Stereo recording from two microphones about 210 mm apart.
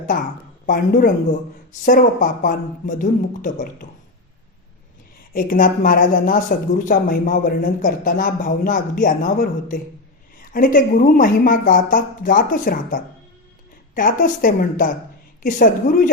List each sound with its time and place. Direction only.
0.1 s speech: 40° left (ahead or behind)
5.3 s speech: 40° left (ahead or behind)